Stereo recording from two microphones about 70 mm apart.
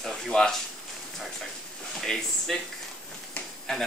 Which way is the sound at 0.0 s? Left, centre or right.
Centre.